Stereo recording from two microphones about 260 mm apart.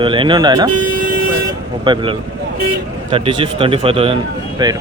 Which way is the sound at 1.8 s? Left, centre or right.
Centre.